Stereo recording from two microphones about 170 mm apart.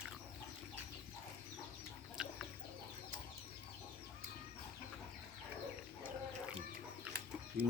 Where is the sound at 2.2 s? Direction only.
5° right (ahead or behind).